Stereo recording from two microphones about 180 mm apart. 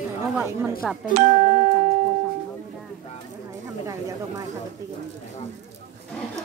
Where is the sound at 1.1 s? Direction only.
40° right (ahead or behind).